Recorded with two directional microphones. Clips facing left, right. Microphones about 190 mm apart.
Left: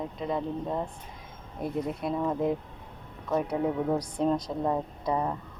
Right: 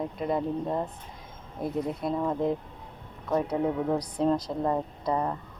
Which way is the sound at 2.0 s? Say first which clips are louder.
Right 1 dB; 5° left (ahead or behind).